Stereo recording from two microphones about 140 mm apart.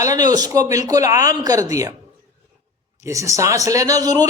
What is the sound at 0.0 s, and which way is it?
A man's voice, 25° right (ahead or behind).